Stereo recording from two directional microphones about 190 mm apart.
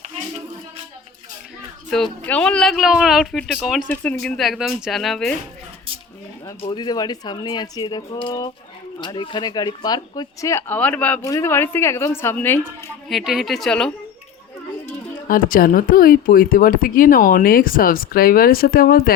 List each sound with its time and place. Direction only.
2.2 s speech: 5° left (ahead or behind)
6.4 s speech: 25° left (ahead or behind)
13.1 s speech: centre (ahead or behind)
15.3 s speech: 50° left (ahead or behind)